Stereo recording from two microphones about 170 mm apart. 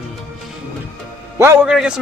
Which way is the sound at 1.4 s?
15° right (ahead or behind).